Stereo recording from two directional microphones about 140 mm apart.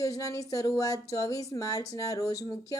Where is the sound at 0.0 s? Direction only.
25° left (ahead or behind).